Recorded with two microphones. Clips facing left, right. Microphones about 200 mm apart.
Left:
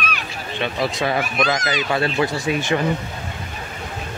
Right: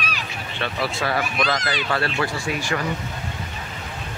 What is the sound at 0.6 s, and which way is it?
Speech, 15° left (ahead or behind).